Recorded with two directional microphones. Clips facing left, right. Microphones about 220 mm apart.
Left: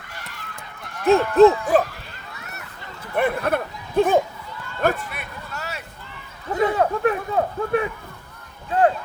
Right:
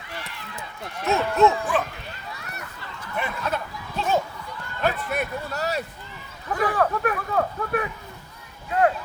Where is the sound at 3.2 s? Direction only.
55° left (ahead or behind).